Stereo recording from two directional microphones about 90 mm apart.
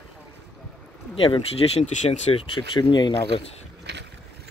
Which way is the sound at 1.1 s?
85° left.